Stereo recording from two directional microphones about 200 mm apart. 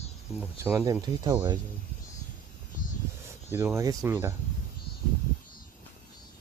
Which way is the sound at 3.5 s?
15° right (ahead or behind).